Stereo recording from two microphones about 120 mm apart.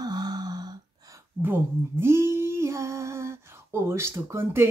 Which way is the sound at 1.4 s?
20° right (ahead or behind).